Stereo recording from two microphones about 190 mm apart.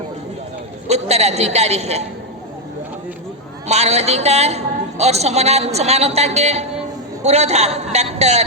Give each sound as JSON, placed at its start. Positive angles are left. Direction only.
{"t": 0.9, "sound": "a man's voice", "side_deg": -35}
{"t": 3.7, "sound": "a woman's voice", "side_deg": -35}